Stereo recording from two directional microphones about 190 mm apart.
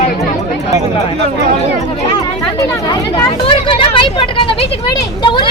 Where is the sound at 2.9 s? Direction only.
20° left (ahead or behind).